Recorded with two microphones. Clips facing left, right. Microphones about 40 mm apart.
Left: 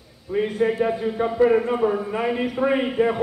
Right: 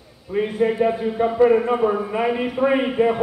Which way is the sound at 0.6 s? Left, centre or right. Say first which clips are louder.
Right 3 dB; centre.